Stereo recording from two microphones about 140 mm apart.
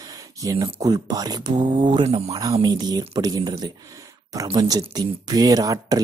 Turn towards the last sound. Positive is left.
turn(degrees=-25)  # may be behind; listen again after turning